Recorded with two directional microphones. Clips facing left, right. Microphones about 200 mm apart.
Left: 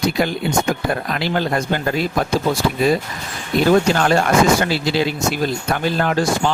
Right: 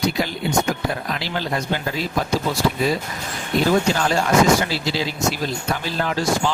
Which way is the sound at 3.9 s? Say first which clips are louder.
Left 3 dB; 60° left (ahead or behind).